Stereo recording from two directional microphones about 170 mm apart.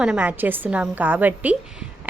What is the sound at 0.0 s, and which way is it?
A woman's voice, 5° right (ahead or behind).